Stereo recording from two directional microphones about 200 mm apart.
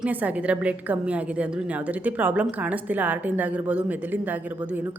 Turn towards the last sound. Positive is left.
turn(degrees=-10)  # may be behind; listen again after turning